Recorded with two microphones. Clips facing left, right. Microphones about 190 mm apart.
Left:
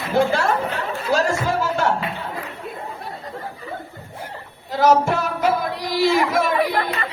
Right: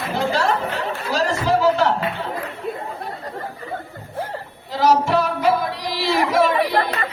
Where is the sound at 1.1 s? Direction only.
50° left (ahead or behind).